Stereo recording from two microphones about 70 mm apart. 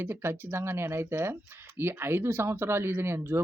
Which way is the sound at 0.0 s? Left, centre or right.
Right.